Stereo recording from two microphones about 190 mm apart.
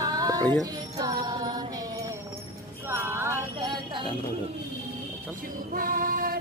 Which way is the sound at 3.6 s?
25° right (ahead or behind).